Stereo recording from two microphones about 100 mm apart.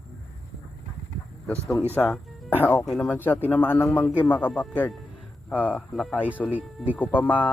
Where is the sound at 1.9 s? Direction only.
15° left (ahead or behind).